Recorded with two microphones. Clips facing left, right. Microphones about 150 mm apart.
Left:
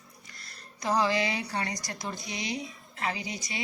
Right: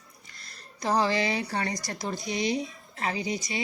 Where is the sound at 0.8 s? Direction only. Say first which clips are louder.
Right 1 dB; 30° right (ahead or behind).